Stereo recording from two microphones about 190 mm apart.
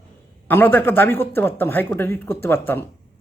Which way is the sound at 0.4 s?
10° left (ahead or behind).